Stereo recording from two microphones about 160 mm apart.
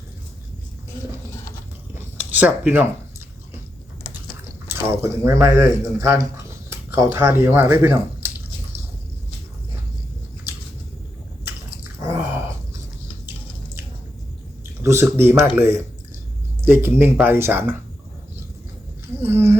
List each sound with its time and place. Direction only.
2.3 s speech: 10° right (ahead or behind)
4.6 s speech: 15° right (ahead or behind)
11.9 s chewing: 15° right (ahead or behind)
14.8 s speech: 15° right (ahead or behind)
19.2 s speech: 15° right (ahead or behind)